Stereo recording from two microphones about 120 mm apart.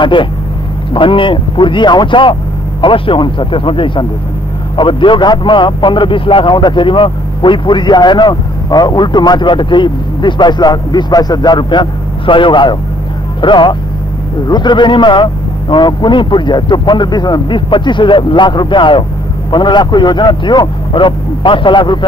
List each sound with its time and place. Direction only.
0.0 s a man's voice: 45° left (ahead or behind)